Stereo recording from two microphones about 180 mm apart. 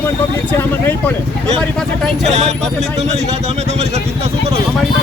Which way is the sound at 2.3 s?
40° right (ahead or behind).